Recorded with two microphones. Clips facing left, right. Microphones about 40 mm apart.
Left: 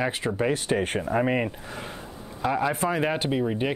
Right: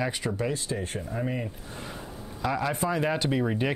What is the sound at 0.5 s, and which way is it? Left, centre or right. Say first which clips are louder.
Speech: left 7 dB; left.